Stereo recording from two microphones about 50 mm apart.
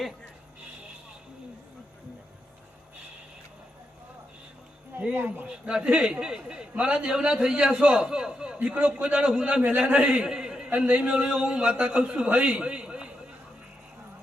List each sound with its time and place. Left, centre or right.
5.1 s speech: right
5.7 s a man's voice: centre
8.6 s a man's voice: right
10.2 s a sound: centre
10.7 s speech: right
11.1 s a man's voice: centre
12.3 s a sound: right